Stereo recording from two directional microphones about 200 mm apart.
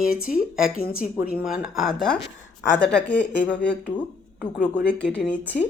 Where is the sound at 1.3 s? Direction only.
5° right (ahead or behind).